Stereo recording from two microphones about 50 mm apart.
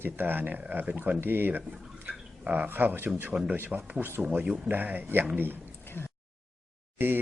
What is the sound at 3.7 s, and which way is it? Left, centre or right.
Speech, centre.